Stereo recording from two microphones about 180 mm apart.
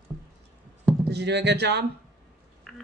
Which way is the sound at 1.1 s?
70° right (ahead or behind).